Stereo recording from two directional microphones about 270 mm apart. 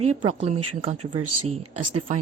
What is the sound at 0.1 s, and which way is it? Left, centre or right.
A woman's voice, right.